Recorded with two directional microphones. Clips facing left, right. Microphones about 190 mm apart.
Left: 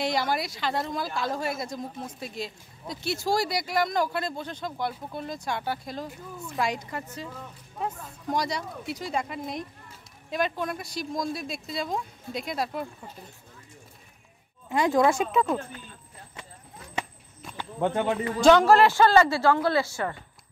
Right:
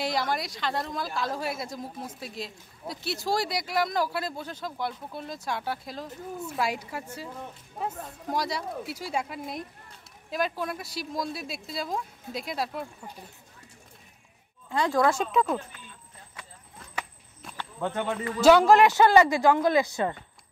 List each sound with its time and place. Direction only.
0.0 s speech: centre (ahead or behind)
8.3 s speech: 5° right (ahead or behind)
14.7 s speech: 20° left (ahead or behind)
15.3 s speech: centre (ahead or behind)
17.7 s speech: 25° left (ahead or behind)
18.4 s a woman's voice: 10° right (ahead or behind)